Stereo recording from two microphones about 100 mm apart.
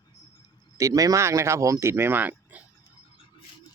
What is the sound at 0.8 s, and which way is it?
Speech, 35° right (ahead or behind).